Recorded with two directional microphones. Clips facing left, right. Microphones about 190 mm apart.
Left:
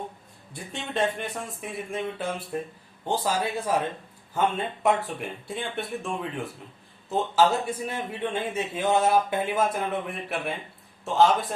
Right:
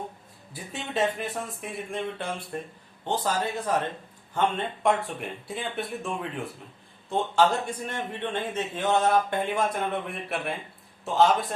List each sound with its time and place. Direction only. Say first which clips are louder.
0.5 s a man's voice: even; 5° right (ahead or behind)